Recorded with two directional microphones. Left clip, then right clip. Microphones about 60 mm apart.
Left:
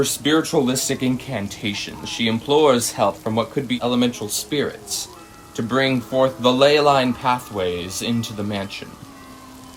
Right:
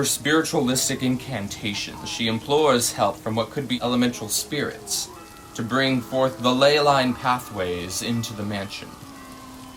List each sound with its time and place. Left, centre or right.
0.0 s speech: left